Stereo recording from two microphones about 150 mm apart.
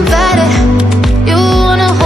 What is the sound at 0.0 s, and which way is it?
Music, centre (ahead or behind).